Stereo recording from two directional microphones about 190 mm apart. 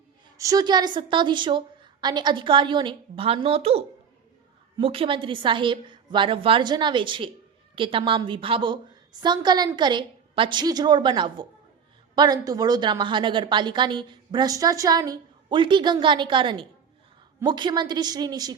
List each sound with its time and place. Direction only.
0.3 s a woman's voice: 20° right (ahead or behind)